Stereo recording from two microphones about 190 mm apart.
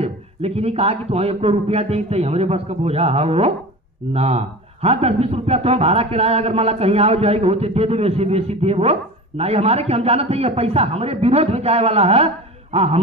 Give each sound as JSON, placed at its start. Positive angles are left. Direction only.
{"t": 0.0, "sound": "a man's voice", "side_deg": -30}